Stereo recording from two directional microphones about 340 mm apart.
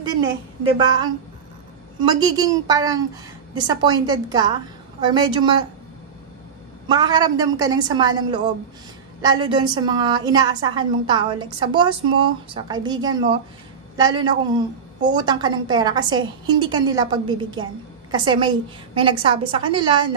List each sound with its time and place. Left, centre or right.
0.7 s a woman's voice: centre
6.9 s a woman's voice: centre